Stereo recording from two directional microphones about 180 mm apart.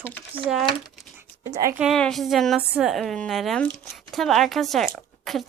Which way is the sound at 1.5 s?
15° right (ahead or behind).